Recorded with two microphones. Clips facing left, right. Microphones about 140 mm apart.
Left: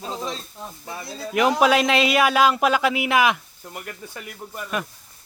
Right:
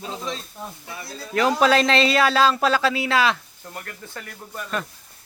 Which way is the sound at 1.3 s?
15° left (ahead or behind).